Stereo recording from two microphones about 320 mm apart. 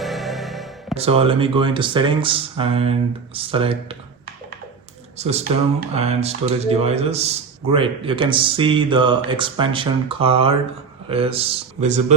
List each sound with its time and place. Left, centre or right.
0.0 s music: centre
0.9 s speech: centre
5.1 s speech: centre